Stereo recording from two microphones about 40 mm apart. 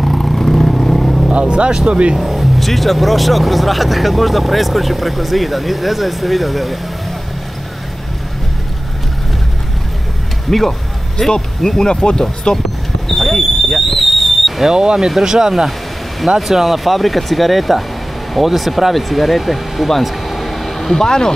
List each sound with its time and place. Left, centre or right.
0.0 s vehicle: centre
1.3 s vehicle: right
2.1 s speech: centre
10.5 s speech: centre; by 12.5 s left
13.1 s a sound: centre
14.7 s speech: centre
21.0 s speech: centre